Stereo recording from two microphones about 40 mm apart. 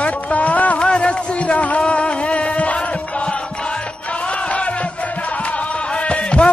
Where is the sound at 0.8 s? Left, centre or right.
Left.